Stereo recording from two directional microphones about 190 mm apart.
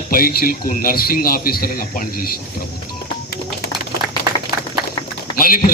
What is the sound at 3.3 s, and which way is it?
Bird, 50° left (ahead or behind).